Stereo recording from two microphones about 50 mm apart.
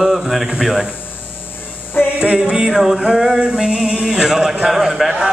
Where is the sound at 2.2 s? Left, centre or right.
Centre.